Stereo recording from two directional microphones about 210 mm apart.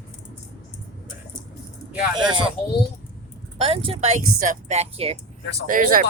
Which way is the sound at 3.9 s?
35° right (ahead or behind).